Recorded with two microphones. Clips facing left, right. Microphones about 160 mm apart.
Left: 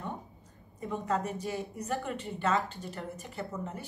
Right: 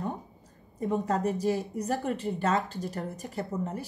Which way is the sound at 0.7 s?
40° right (ahead or behind).